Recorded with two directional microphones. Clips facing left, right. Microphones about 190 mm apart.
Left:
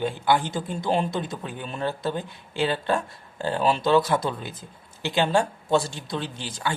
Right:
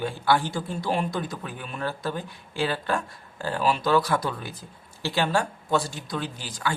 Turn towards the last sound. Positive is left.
turn(degrees=25)  # may be behind; listen again after turning